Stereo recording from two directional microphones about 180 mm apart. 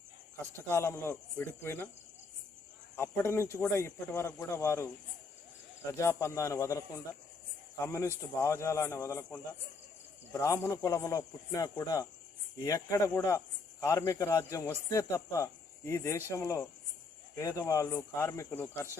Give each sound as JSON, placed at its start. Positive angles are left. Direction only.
{"t": 0.7, "sound": "speech", "side_deg": 15}
{"t": 2.9, "sound": "speech", "side_deg": 15}
{"t": 5.9, "sound": "speech", "side_deg": 15}
{"t": 8.4, "sound": "speech", "side_deg": 15}